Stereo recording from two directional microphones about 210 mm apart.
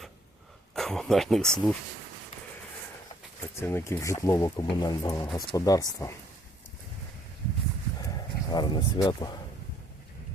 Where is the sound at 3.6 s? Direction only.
10° left (ahead or behind).